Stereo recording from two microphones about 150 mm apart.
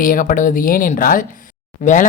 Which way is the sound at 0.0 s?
65° left (ahead or behind).